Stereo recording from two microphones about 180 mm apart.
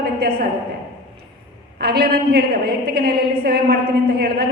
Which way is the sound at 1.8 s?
60° right (ahead or behind).